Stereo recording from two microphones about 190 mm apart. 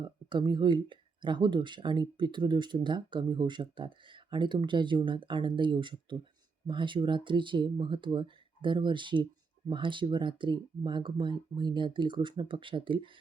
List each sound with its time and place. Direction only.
0.0 s speech: 25° right (ahead or behind)